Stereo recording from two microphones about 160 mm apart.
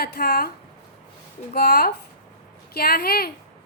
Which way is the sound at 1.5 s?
90° left.